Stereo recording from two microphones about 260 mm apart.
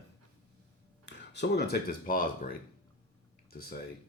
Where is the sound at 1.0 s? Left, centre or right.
Left.